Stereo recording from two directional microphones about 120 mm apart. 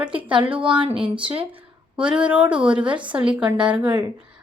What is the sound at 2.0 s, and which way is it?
A woman's voice, 10° right (ahead or behind).